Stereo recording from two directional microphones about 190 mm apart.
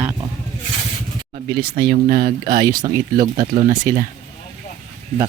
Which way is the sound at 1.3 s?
50° right (ahead or behind).